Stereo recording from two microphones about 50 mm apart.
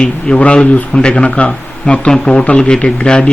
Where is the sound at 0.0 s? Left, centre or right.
Left.